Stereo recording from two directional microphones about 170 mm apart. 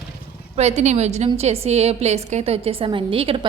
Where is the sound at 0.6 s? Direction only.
40° right (ahead or behind).